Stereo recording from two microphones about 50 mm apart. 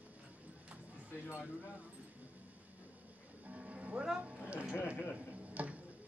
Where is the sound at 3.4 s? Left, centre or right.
Right.